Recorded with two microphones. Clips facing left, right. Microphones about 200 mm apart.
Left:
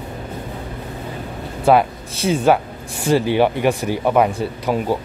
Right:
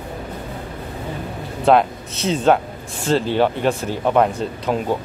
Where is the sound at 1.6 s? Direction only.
10° left (ahead or behind).